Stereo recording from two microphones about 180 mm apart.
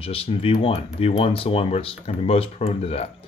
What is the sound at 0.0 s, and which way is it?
Speech, 30° left (ahead or behind).